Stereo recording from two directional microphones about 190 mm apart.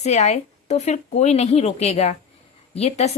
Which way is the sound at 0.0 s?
35° left (ahead or behind).